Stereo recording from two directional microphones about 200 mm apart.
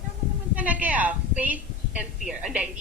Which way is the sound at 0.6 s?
5° right (ahead or behind).